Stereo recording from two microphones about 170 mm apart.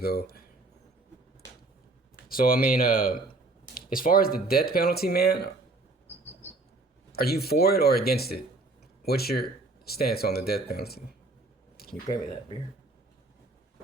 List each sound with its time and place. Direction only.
0.0 s speech: 65° left (ahead or behind)
2.3 s speech: 60° left (ahead or behind)
7.1 s speech: 65° left (ahead or behind)
12.0 s speech: 25° left (ahead or behind)